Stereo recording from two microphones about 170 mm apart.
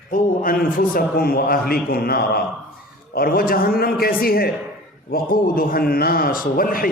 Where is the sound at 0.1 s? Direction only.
55° left (ahead or behind).